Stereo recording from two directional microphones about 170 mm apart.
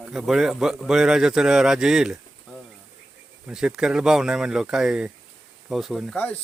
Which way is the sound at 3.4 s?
5° right (ahead or behind).